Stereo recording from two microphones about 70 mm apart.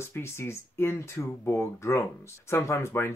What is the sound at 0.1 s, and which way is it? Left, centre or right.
Speech, left.